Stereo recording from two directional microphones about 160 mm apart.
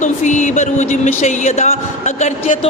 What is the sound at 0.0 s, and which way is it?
A man's voice, 50° left (ahead or behind).